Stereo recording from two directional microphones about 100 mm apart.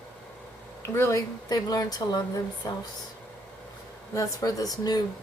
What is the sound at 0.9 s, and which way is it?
A woman's voice, 30° left (ahead or behind).